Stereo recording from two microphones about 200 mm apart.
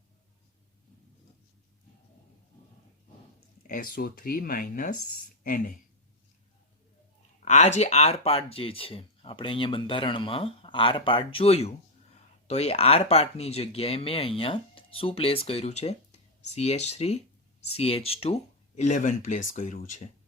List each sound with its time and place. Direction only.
3.7 s speech: 45° left (ahead or behind)
7.4 s speech: 35° left (ahead or behind)